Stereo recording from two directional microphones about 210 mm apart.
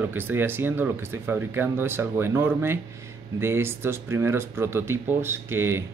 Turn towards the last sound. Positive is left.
turn(degrees=-10)  # may be behind; listen again after turning